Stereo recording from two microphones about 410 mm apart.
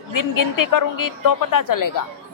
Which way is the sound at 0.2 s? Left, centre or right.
Left.